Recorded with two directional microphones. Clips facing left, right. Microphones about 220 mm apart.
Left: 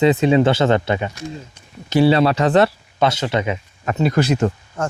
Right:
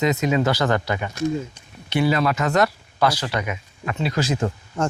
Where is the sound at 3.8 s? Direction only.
45° left (ahead or behind); by 4.5 s 70° left (ahead or behind).